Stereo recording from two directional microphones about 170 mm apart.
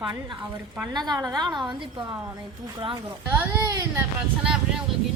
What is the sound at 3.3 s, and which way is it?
Speech, 20° right (ahead or behind).